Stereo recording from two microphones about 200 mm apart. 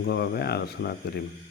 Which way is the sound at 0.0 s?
55° left (ahead or behind).